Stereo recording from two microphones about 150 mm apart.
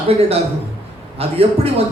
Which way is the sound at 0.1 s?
40° right (ahead or behind).